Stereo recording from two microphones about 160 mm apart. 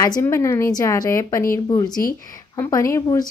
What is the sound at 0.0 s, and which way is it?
A woman's voice, 20° left (ahead or behind).